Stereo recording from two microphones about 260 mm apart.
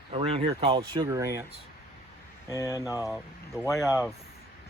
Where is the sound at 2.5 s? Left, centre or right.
Centre.